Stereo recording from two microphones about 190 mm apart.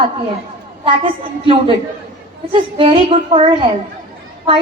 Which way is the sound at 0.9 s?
25° right (ahead or behind).